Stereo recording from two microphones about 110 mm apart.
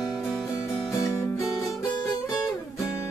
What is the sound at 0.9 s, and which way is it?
Music, 30° left (ahead or behind).